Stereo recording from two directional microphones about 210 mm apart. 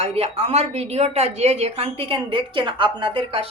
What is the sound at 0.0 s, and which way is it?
A woman's voice, 30° right (ahead or behind).